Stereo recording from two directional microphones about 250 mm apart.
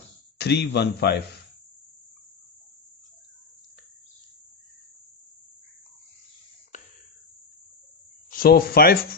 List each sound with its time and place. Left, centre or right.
0.4 s speech: left
8.3 s speech: left